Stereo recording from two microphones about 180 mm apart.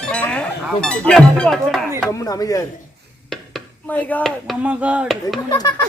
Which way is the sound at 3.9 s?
10° left (ahead or behind).